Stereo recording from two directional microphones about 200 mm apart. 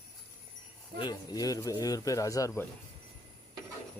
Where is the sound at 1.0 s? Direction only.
20° left (ahead or behind).